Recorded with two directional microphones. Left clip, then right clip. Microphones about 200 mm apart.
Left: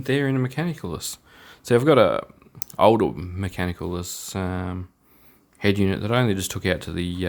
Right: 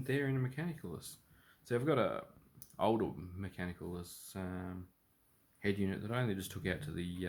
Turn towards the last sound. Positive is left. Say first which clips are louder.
# left 15 dB
turn(degrees=45)  # may be behind; listen again after turning